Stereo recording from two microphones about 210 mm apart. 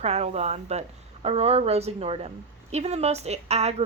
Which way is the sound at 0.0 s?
30° right (ahead or behind).